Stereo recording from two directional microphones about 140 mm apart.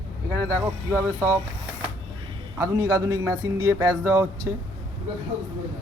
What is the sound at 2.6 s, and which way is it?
Speech, 25° right (ahead or behind).